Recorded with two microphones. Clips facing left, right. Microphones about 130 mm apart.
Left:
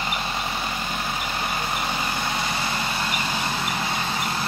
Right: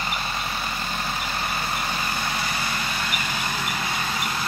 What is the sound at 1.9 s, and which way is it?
Vehicle, 20° left (ahead or behind).